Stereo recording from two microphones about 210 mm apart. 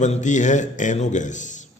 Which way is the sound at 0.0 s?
35° left (ahead or behind).